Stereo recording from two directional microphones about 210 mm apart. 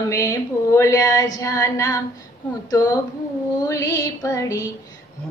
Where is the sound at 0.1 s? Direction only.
15° left (ahead or behind).